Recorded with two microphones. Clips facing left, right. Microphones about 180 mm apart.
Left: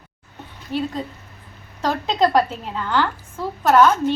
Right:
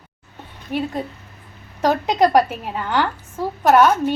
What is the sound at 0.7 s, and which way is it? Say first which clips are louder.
A woman's voice: right 1 dB; 15° right (ahead or behind).